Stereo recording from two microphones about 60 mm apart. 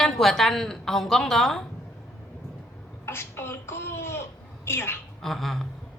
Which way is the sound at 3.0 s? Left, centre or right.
Left.